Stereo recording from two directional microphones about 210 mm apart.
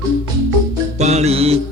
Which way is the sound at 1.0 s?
30° right (ahead or behind).